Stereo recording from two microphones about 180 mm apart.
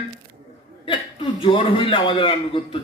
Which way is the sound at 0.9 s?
30° left (ahead or behind).